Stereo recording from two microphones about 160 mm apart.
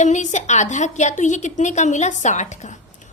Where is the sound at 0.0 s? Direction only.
50° left (ahead or behind).